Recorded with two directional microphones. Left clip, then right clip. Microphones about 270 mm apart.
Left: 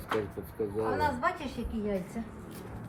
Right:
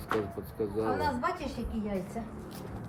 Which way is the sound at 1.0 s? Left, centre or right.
Centre.